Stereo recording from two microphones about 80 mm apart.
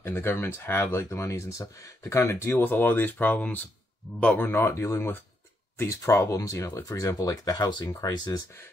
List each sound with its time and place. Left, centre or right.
0.0 s speech: left
4.4 s speech: left